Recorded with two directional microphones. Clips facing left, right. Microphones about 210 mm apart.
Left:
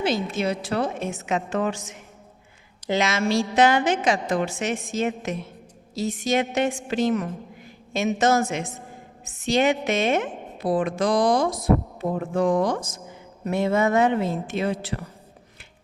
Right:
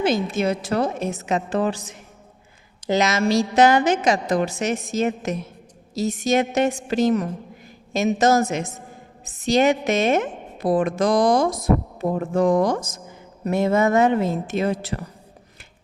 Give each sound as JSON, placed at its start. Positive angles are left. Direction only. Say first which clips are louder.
{"t": 0.0, "sound": "a woman's voice", "louder": "right 3 dB", "side_deg": -50}